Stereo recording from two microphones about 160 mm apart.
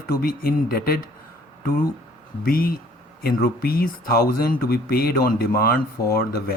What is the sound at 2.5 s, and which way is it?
Speech, 70° left (ahead or behind).